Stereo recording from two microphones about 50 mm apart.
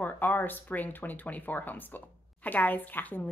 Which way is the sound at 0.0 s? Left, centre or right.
Left.